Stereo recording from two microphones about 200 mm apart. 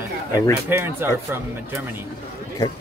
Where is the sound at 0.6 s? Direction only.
10° right (ahead or behind).